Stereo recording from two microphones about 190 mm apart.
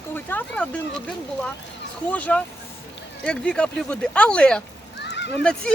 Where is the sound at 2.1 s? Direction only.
5° left (ahead or behind).